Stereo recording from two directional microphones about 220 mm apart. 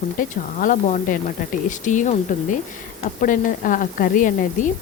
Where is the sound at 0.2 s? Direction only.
35° left (ahead or behind).